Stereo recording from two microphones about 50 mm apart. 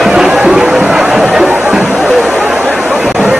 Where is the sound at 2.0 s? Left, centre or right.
Centre.